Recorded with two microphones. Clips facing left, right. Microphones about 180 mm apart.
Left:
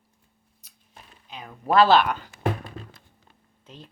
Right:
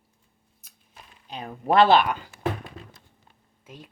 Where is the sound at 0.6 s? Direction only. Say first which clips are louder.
Right 1 dB; 50° right (ahead or behind).